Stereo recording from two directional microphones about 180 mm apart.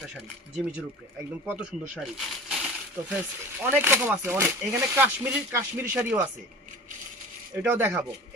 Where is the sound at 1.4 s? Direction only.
5° right (ahead or behind).